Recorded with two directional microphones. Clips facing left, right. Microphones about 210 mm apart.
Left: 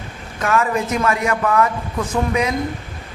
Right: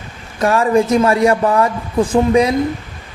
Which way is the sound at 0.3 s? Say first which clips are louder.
Right 6 dB; 30° right (ahead or behind).